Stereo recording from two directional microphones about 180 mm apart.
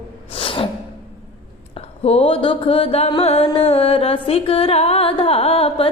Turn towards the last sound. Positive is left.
turn(degrees=35)  # may be behind; listen again after turning